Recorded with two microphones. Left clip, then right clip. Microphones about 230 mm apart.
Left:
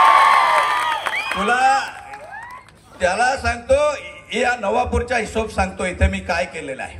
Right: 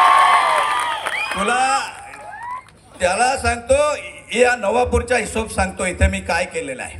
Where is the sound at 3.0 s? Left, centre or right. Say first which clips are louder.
Right 1 dB; right.